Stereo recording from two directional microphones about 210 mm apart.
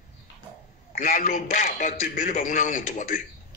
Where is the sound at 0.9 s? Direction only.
40° left (ahead or behind).